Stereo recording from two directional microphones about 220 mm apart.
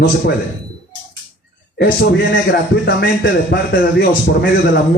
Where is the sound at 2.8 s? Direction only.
45° left (ahead or behind).